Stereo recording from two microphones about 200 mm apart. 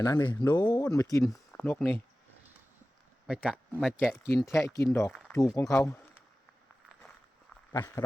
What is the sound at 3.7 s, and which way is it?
Speech, 5° left (ahead or behind).